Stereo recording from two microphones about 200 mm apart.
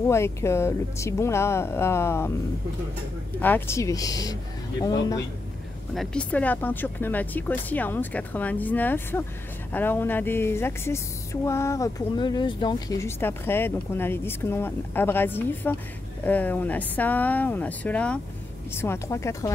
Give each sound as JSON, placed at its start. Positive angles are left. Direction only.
{"t": 0.1, "sound": "speech", "side_deg": 15}
{"t": 3.3, "sound": "speech", "side_deg": 10}
{"t": 5.9, "sound": "speech", "side_deg": 5}